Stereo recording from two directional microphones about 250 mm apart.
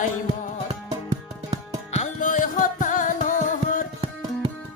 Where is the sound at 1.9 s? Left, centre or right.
Left.